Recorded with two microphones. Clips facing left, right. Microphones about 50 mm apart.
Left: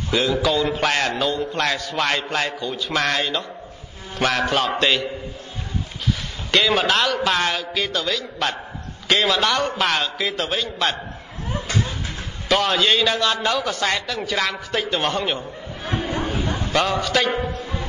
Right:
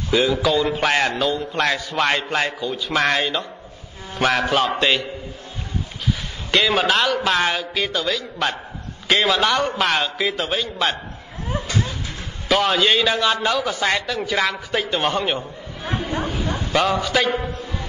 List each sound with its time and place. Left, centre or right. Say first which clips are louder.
0.1 s a man's voice: right 2 dB; centre
2.6 s a man's voice: right 2 dB; centre
6.5 s a man's voice: even; centre
11.6 s a sound: even; left
12.4 s a man's voice: right 1 dB; centre
15.3 s speech: right 1 dB; right
16.7 s a man's voice: right 1 dB; centre